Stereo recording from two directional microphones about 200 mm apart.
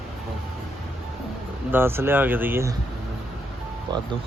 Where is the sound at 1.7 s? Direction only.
10° right (ahead or behind).